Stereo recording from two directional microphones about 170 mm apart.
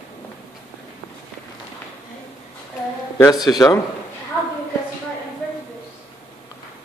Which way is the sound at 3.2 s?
25° left (ahead or behind).